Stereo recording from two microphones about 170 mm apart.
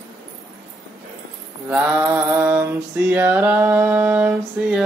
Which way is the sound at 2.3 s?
10° right (ahead or behind).